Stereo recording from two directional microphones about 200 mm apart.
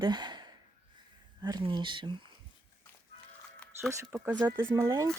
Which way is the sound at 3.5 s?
5° left (ahead or behind).